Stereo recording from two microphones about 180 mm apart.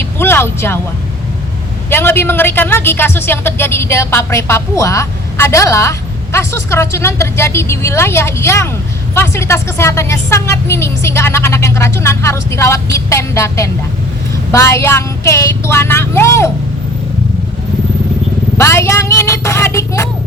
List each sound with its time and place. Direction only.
0.0 s a sound: 15° left (ahead or behind)
1.9 s a woman's voice: 10° left (ahead or behind)
18.5 s a woman's voice: 15° left (ahead or behind)